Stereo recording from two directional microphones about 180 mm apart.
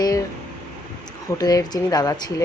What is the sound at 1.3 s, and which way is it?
A woman's voice, 20° left (ahead or behind).